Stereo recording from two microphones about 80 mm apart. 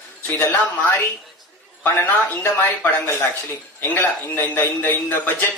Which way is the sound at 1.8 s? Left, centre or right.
Left.